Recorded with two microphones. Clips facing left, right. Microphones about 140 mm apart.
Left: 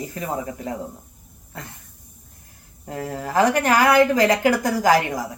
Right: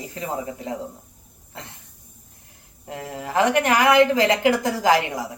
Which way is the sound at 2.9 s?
35° left (ahead or behind).